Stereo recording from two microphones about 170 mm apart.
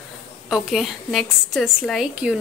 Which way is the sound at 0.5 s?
Centre (ahead or behind).